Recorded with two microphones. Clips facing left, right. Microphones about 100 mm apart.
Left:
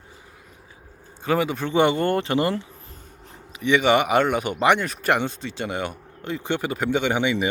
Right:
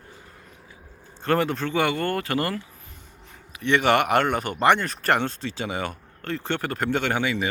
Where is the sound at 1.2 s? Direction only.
5° left (ahead or behind).